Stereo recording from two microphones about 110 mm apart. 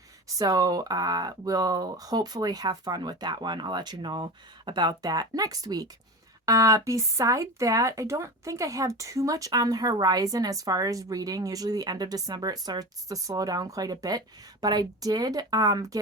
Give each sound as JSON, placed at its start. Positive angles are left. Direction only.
{"t": 0.3, "sound": "speech", "side_deg": -35}